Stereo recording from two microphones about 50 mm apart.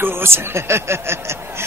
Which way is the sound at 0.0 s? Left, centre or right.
Right.